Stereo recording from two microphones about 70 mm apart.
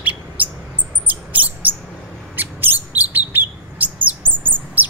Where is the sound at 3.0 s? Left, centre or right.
Right.